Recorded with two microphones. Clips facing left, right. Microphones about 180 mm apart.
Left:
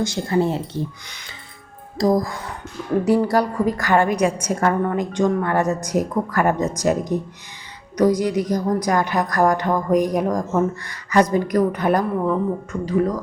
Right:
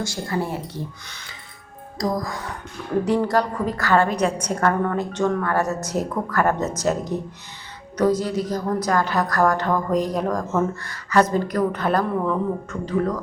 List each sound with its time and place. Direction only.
0.0 s speech: 20° left (ahead or behind)
3.0 s a woman's voice: 10° left (ahead or behind)